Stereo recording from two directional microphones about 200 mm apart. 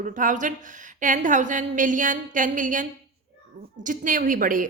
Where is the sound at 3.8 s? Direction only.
40° right (ahead or behind).